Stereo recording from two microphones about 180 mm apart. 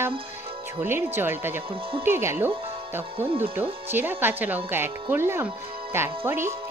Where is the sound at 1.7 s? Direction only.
30° right (ahead or behind).